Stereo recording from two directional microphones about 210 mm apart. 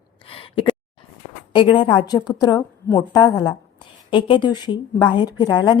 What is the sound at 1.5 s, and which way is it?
A woman's voice, 20° left (ahead or behind).